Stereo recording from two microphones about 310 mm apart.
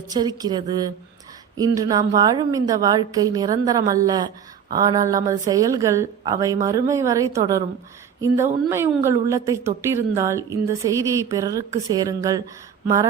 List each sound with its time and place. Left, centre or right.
0.1 s a woman's voice: centre